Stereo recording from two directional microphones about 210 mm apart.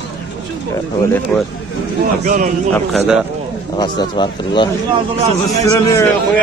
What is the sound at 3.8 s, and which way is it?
Speech, 20° left (ahead or behind).